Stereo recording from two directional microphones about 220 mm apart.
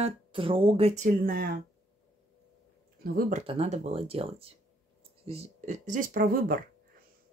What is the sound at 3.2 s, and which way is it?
Speech, 35° right (ahead or behind).